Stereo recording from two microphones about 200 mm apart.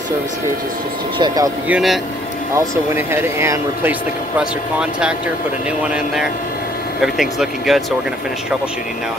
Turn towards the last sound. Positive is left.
turn(degrees=0)  # may be behind; listen again after turning